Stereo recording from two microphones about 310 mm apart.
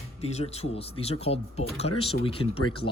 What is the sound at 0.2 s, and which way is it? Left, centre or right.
Speech, centre.